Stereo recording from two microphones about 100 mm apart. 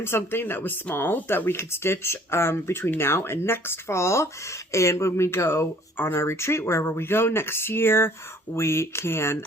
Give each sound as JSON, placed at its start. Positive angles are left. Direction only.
{"t": 0.0, "sound": "speech", "side_deg": 25}